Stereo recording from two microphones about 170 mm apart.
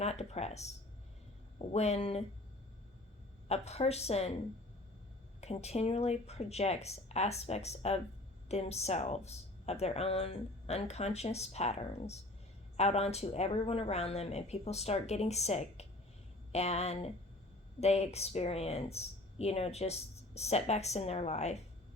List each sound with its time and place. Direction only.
0.0 s speech: 40° left (ahead or behind)
3.5 s speech: 40° left (ahead or behind)
5.4 s speech: 40° left (ahead or behind)